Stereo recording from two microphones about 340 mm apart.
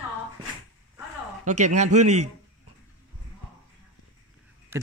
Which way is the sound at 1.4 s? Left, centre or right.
Right.